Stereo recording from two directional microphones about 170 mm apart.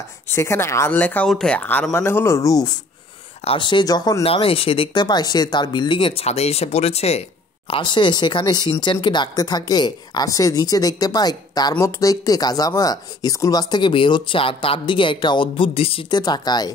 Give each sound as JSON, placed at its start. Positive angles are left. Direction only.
{"t": 0.3, "sound": "speech", "side_deg": 15}
{"t": 4.2, "sound": "speech", "side_deg": 35}